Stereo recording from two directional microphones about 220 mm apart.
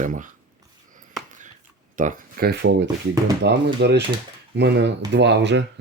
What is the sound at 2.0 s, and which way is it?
Speech, 35° right (ahead or behind).